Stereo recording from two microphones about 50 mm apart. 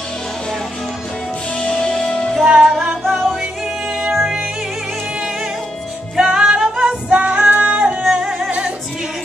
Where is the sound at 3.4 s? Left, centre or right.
Centre.